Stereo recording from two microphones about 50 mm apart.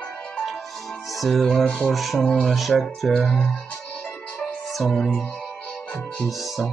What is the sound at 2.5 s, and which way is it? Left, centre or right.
Music, centre.